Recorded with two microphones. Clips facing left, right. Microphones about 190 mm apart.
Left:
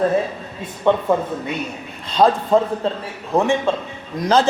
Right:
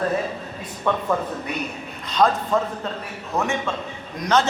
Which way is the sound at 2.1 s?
30° left (ahead or behind).